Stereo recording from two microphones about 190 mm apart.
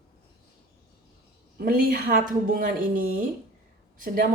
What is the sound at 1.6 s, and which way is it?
A woman's voice, 50° right (ahead or behind).